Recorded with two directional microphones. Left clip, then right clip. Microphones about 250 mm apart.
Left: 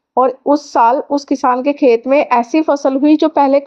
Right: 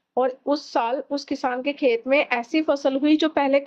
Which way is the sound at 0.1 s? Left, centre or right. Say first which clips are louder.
Left 10 dB; centre.